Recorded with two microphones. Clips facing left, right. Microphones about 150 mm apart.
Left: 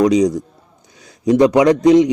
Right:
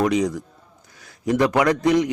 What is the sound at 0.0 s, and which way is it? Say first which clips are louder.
A man's voice: left 7 dB; 20° left (ahead or behind).